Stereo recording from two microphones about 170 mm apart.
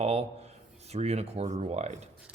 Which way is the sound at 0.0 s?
40° right (ahead or behind).